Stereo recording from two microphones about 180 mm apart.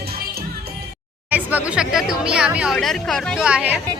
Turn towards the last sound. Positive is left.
turn(degrees=-5)  # may be behind; listen again after turning